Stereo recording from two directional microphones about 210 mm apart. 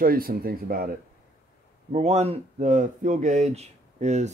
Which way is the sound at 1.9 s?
30° right (ahead or behind).